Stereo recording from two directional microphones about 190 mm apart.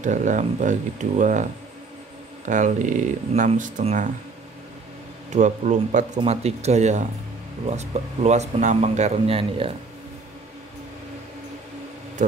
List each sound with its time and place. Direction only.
0.0 s speech: 40° right (ahead or behind)
5.3 s speech: 40° right (ahead or behind)
12.2 s speech: 40° right (ahead or behind)